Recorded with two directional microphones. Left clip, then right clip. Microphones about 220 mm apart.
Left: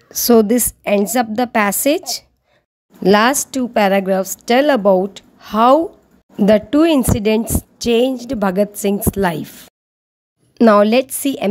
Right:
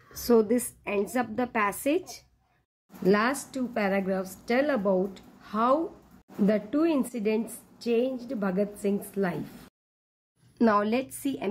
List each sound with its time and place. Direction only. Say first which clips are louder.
0.1 s a woman's voice: left 11 dB; 50° left (ahead or behind)
10.5 s a woman's voice: left 14 dB; 45° left (ahead or behind)